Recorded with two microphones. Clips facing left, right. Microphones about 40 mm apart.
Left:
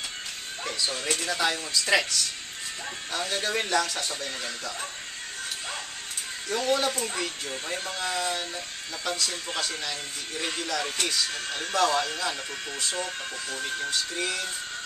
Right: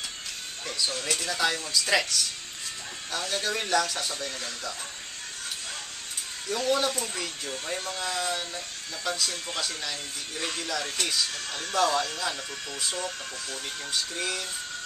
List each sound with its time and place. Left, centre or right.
1.0 s speech: centre
6.5 s speech: centre
7.5 s speech: centre
10.3 s speech: left
10.6 s speech: centre
11.3 s speech: left
11.7 s speech: centre
12.9 s speech: left
13.8 s speech: centre